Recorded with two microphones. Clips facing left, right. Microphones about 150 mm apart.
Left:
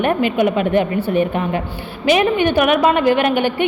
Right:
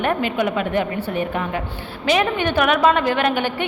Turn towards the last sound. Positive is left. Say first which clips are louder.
# left 4 dB
turn(degrees=15)  # may be behind; listen again after turning